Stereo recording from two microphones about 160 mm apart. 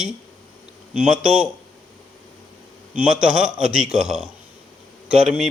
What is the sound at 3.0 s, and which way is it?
A man's voice, 5° right (ahead or behind).